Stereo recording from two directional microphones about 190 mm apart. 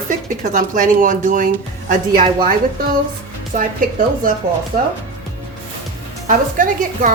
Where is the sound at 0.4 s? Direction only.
40° right (ahead or behind).